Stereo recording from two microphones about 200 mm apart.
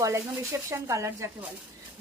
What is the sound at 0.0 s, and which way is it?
A woman's voice, 15° right (ahead or behind).